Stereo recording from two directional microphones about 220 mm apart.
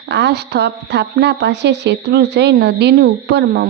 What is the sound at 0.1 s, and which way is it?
Speech, 50° right (ahead or behind).